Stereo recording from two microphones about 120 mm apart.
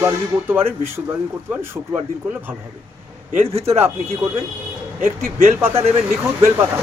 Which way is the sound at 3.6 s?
20° right (ahead or behind).